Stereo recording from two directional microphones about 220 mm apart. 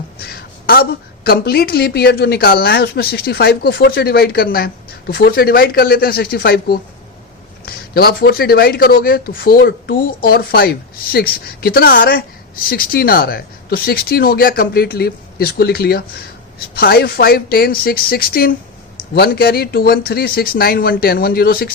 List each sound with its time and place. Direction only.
0.7 s speech: 45° left (ahead or behind)